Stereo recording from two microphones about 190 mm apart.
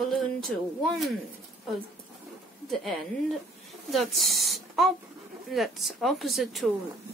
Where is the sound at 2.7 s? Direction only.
Centre (ahead or behind).